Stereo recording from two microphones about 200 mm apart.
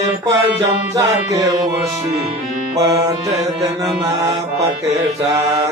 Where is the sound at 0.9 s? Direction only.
20° right (ahead or behind).